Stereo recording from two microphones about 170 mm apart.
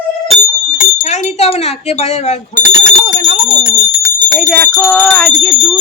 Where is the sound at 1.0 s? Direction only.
45° left (ahead or behind).